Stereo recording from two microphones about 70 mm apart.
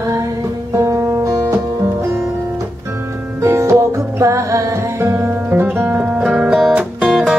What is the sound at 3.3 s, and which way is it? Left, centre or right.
Music, right.